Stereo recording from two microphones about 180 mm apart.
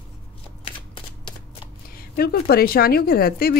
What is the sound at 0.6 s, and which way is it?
Shuffling cards, 30° left (ahead or behind).